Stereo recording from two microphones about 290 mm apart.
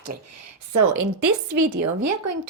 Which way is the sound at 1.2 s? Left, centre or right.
Right.